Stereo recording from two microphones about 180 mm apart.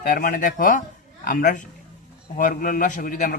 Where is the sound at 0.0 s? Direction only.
50° left (ahead or behind).